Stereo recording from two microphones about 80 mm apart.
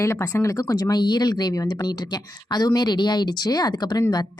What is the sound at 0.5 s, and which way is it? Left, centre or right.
Speech, left.